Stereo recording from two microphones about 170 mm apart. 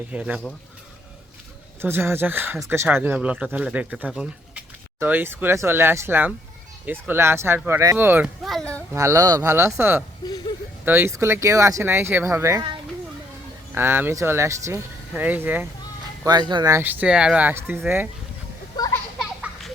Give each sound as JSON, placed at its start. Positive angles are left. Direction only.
{"t": 0.1, "sound": "speech", "side_deg": -5}
{"t": 1.8, "sound": "speech", "side_deg": -15}
{"t": 8.4, "sound": "a sound", "side_deg": 5}
{"t": 8.9, "sound": "speech", "side_deg": -15}
{"t": 13.7, "sound": "speech", "side_deg": -15}
{"t": 16.2, "sound": "speech", "side_deg": -25}
{"t": 18.8, "sound": "children playing", "side_deg": 25}
{"t": 19.2, "sound": "a sound", "side_deg": -5}